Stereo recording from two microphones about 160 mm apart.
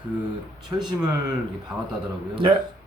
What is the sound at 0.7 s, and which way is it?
Speech, 15° right (ahead or behind).